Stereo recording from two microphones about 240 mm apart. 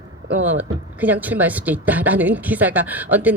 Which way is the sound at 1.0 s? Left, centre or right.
Centre.